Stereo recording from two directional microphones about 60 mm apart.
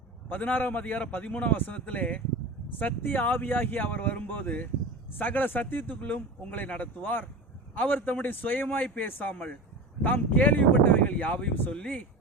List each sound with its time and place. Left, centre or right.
0.3 s speech: left
9.3 s speech: left